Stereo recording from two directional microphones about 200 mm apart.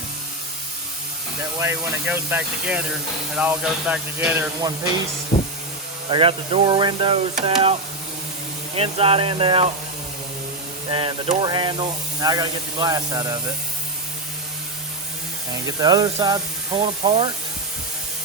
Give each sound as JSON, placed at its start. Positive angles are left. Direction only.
{"t": 1.5, "sound": "speech", "side_deg": -10}
{"t": 6.1, "sound": "speech", "side_deg": -25}
{"t": 10.9, "sound": "speech", "side_deg": -25}
{"t": 15.8, "sound": "speech", "side_deg": -20}